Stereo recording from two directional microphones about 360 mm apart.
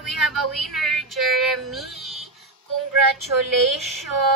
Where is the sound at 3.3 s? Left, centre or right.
Right.